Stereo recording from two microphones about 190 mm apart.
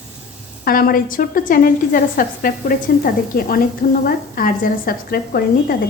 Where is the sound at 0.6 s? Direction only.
50° left (ahead or behind).